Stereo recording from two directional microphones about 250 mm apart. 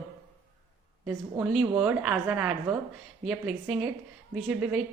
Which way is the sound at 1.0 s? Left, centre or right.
Centre.